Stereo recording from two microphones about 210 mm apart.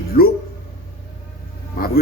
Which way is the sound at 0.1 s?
45° left (ahead or behind).